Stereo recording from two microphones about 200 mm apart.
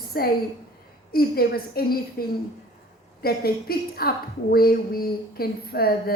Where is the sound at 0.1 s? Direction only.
50° left (ahead or behind).